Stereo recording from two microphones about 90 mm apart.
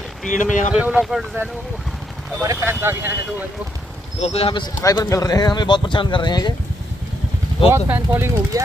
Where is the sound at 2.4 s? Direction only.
25° right (ahead or behind).